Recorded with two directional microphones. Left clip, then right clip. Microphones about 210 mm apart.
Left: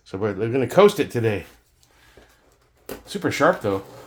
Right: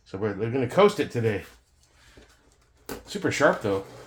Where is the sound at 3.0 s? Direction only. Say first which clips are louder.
Left 3 dB; 35° left (ahead or behind).